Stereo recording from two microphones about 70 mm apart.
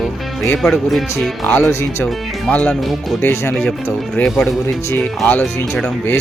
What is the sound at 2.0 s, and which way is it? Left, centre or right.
Speech, centre.